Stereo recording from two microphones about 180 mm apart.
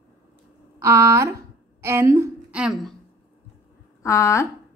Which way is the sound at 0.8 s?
15° right (ahead or behind).